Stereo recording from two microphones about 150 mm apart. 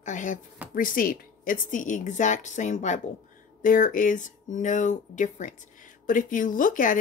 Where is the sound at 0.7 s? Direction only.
70° left (ahead or behind).